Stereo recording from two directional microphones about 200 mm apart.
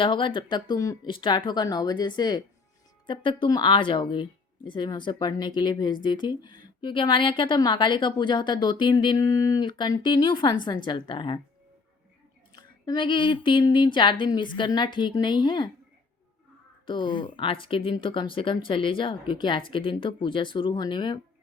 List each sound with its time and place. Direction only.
0.0 s speech: 25° left (ahead or behind)
12.5 s speech: 20° left (ahead or behind)
16.8 s speech: 25° left (ahead or behind)